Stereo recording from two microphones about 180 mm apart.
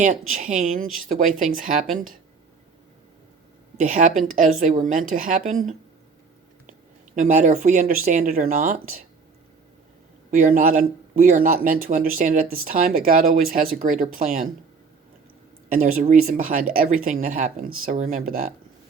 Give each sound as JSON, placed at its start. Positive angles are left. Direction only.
{"t": 0.0, "sound": "speech", "side_deg": -45}
{"t": 3.8, "sound": "speech", "side_deg": -45}
{"t": 7.2, "sound": "speech", "side_deg": -45}
{"t": 10.3, "sound": "speech", "side_deg": -50}
{"t": 15.7, "sound": "speech", "side_deg": -50}